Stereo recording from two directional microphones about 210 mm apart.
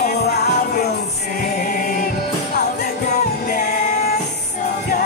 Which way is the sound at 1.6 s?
40° left (ahead or behind).